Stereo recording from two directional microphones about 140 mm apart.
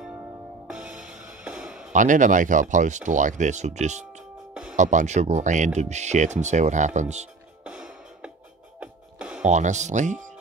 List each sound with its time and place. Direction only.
0.7 s music: 10° right (ahead or behind)
1.9 s speech: 65° right (ahead or behind)
7.6 s music: 10° right (ahead or behind)
9.4 s speech: 60° right (ahead or behind)